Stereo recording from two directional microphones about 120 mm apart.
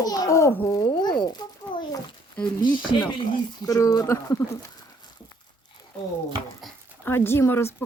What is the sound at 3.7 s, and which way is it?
Speech, 30° left (ahead or behind).